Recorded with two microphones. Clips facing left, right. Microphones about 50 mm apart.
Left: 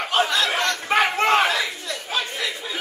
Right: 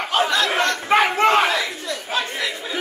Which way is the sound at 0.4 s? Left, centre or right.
Right.